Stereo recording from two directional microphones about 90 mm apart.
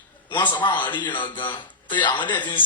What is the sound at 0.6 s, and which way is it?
Speech, 60° left (ahead or behind).